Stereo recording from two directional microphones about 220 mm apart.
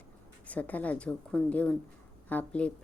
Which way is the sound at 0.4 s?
5° left (ahead or behind).